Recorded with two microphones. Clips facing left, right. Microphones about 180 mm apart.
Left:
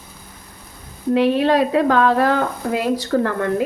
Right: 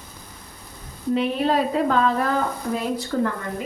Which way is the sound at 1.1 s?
75° left (ahead or behind).